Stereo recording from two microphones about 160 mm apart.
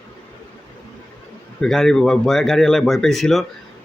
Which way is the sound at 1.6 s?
Centre (ahead or behind).